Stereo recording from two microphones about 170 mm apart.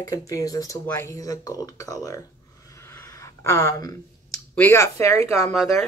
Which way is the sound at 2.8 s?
15° left (ahead or behind).